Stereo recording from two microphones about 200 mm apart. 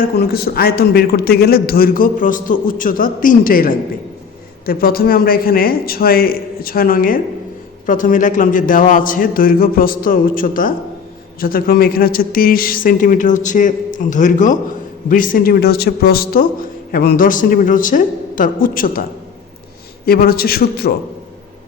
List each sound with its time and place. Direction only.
0.3 s a man's voice: 50° left (ahead or behind)
20.1 s a man's voice: 50° left (ahead or behind)